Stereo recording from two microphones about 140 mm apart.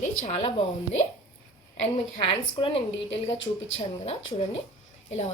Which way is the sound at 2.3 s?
40° left (ahead or behind).